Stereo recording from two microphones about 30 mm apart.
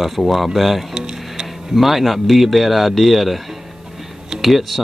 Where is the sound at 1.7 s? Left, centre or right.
Centre.